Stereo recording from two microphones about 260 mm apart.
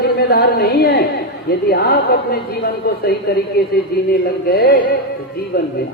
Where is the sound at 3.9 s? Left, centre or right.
Left.